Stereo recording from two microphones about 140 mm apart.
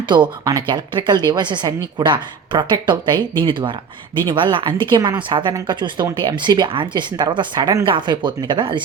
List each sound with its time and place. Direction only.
0.1 s a woman's voice: 30° right (ahead or behind)